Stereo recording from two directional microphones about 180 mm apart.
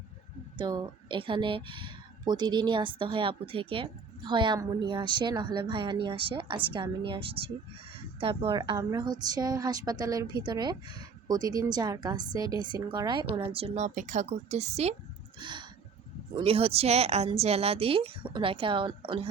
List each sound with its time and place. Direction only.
0.5 s a woman's voice: 25° right (ahead or behind)
15.4 s a sound: 25° right (ahead or behind)
16.4 s a woman's voice: 30° right (ahead or behind)